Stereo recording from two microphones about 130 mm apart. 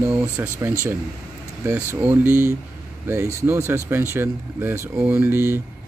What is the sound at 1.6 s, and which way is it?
Speech, 15° right (ahead or behind).